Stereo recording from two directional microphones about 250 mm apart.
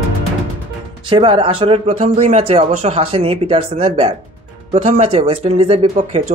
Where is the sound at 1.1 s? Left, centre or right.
Right.